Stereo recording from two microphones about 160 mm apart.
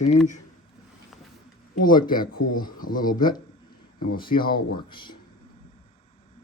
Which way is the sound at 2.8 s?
60° left (ahead or behind).